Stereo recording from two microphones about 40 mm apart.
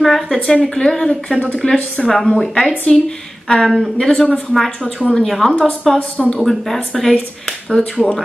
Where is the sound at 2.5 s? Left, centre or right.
Left.